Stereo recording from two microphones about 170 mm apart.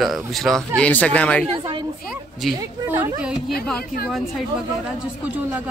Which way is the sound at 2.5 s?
20° right (ahead or behind).